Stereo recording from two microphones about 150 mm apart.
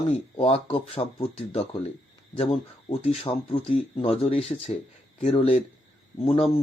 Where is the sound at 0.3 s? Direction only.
40° left (ahead or behind).